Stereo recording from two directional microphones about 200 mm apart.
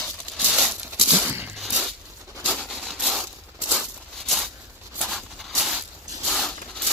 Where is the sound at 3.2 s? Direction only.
5° right (ahead or behind).